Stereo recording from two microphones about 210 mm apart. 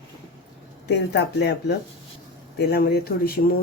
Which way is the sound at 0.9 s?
55° left (ahead or behind).